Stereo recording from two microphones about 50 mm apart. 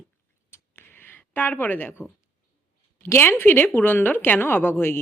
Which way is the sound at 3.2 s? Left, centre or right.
Left.